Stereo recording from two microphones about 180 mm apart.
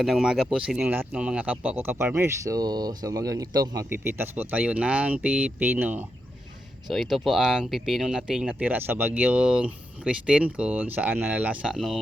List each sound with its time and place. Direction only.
0.0 s speech: 5° right (ahead or behind)